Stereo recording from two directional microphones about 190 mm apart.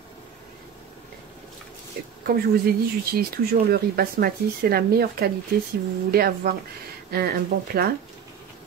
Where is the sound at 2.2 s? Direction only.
50° right (ahead or behind).